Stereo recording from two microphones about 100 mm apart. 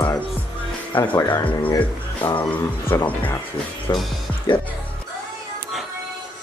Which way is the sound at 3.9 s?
40° left (ahead or behind).